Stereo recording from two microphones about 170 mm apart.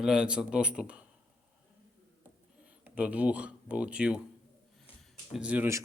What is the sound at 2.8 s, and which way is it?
Speech, 10° right (ahead or behind).